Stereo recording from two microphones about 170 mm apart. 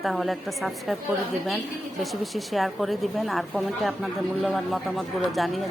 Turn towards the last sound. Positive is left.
turn(degrees=0)  # may be behind; listen again after turning